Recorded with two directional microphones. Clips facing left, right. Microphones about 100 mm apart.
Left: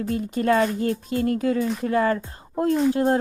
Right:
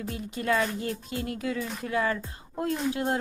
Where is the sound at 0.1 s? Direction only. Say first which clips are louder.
Left 7 dB; 45° left (ahead or behind).